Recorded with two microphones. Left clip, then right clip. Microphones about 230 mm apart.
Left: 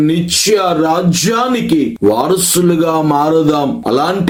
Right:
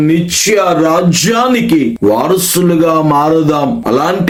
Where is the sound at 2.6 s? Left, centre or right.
Centre.